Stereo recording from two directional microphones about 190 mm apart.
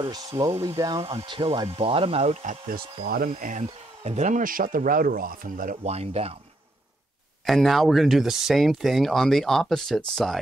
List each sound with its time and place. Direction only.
0.1 s speech: 20° right (ahead or behind)
3.1 s speech: 50° right (ahead or behind); by 6.3 s 35° right (ahead or behind)
7.4 s speech: centre (ahead or behind)